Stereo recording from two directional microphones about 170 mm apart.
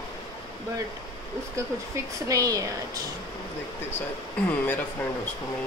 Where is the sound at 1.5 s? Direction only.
20° right (ahead or behind).